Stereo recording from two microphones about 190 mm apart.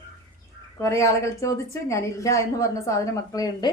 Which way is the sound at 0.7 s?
15° left (ahead or behind).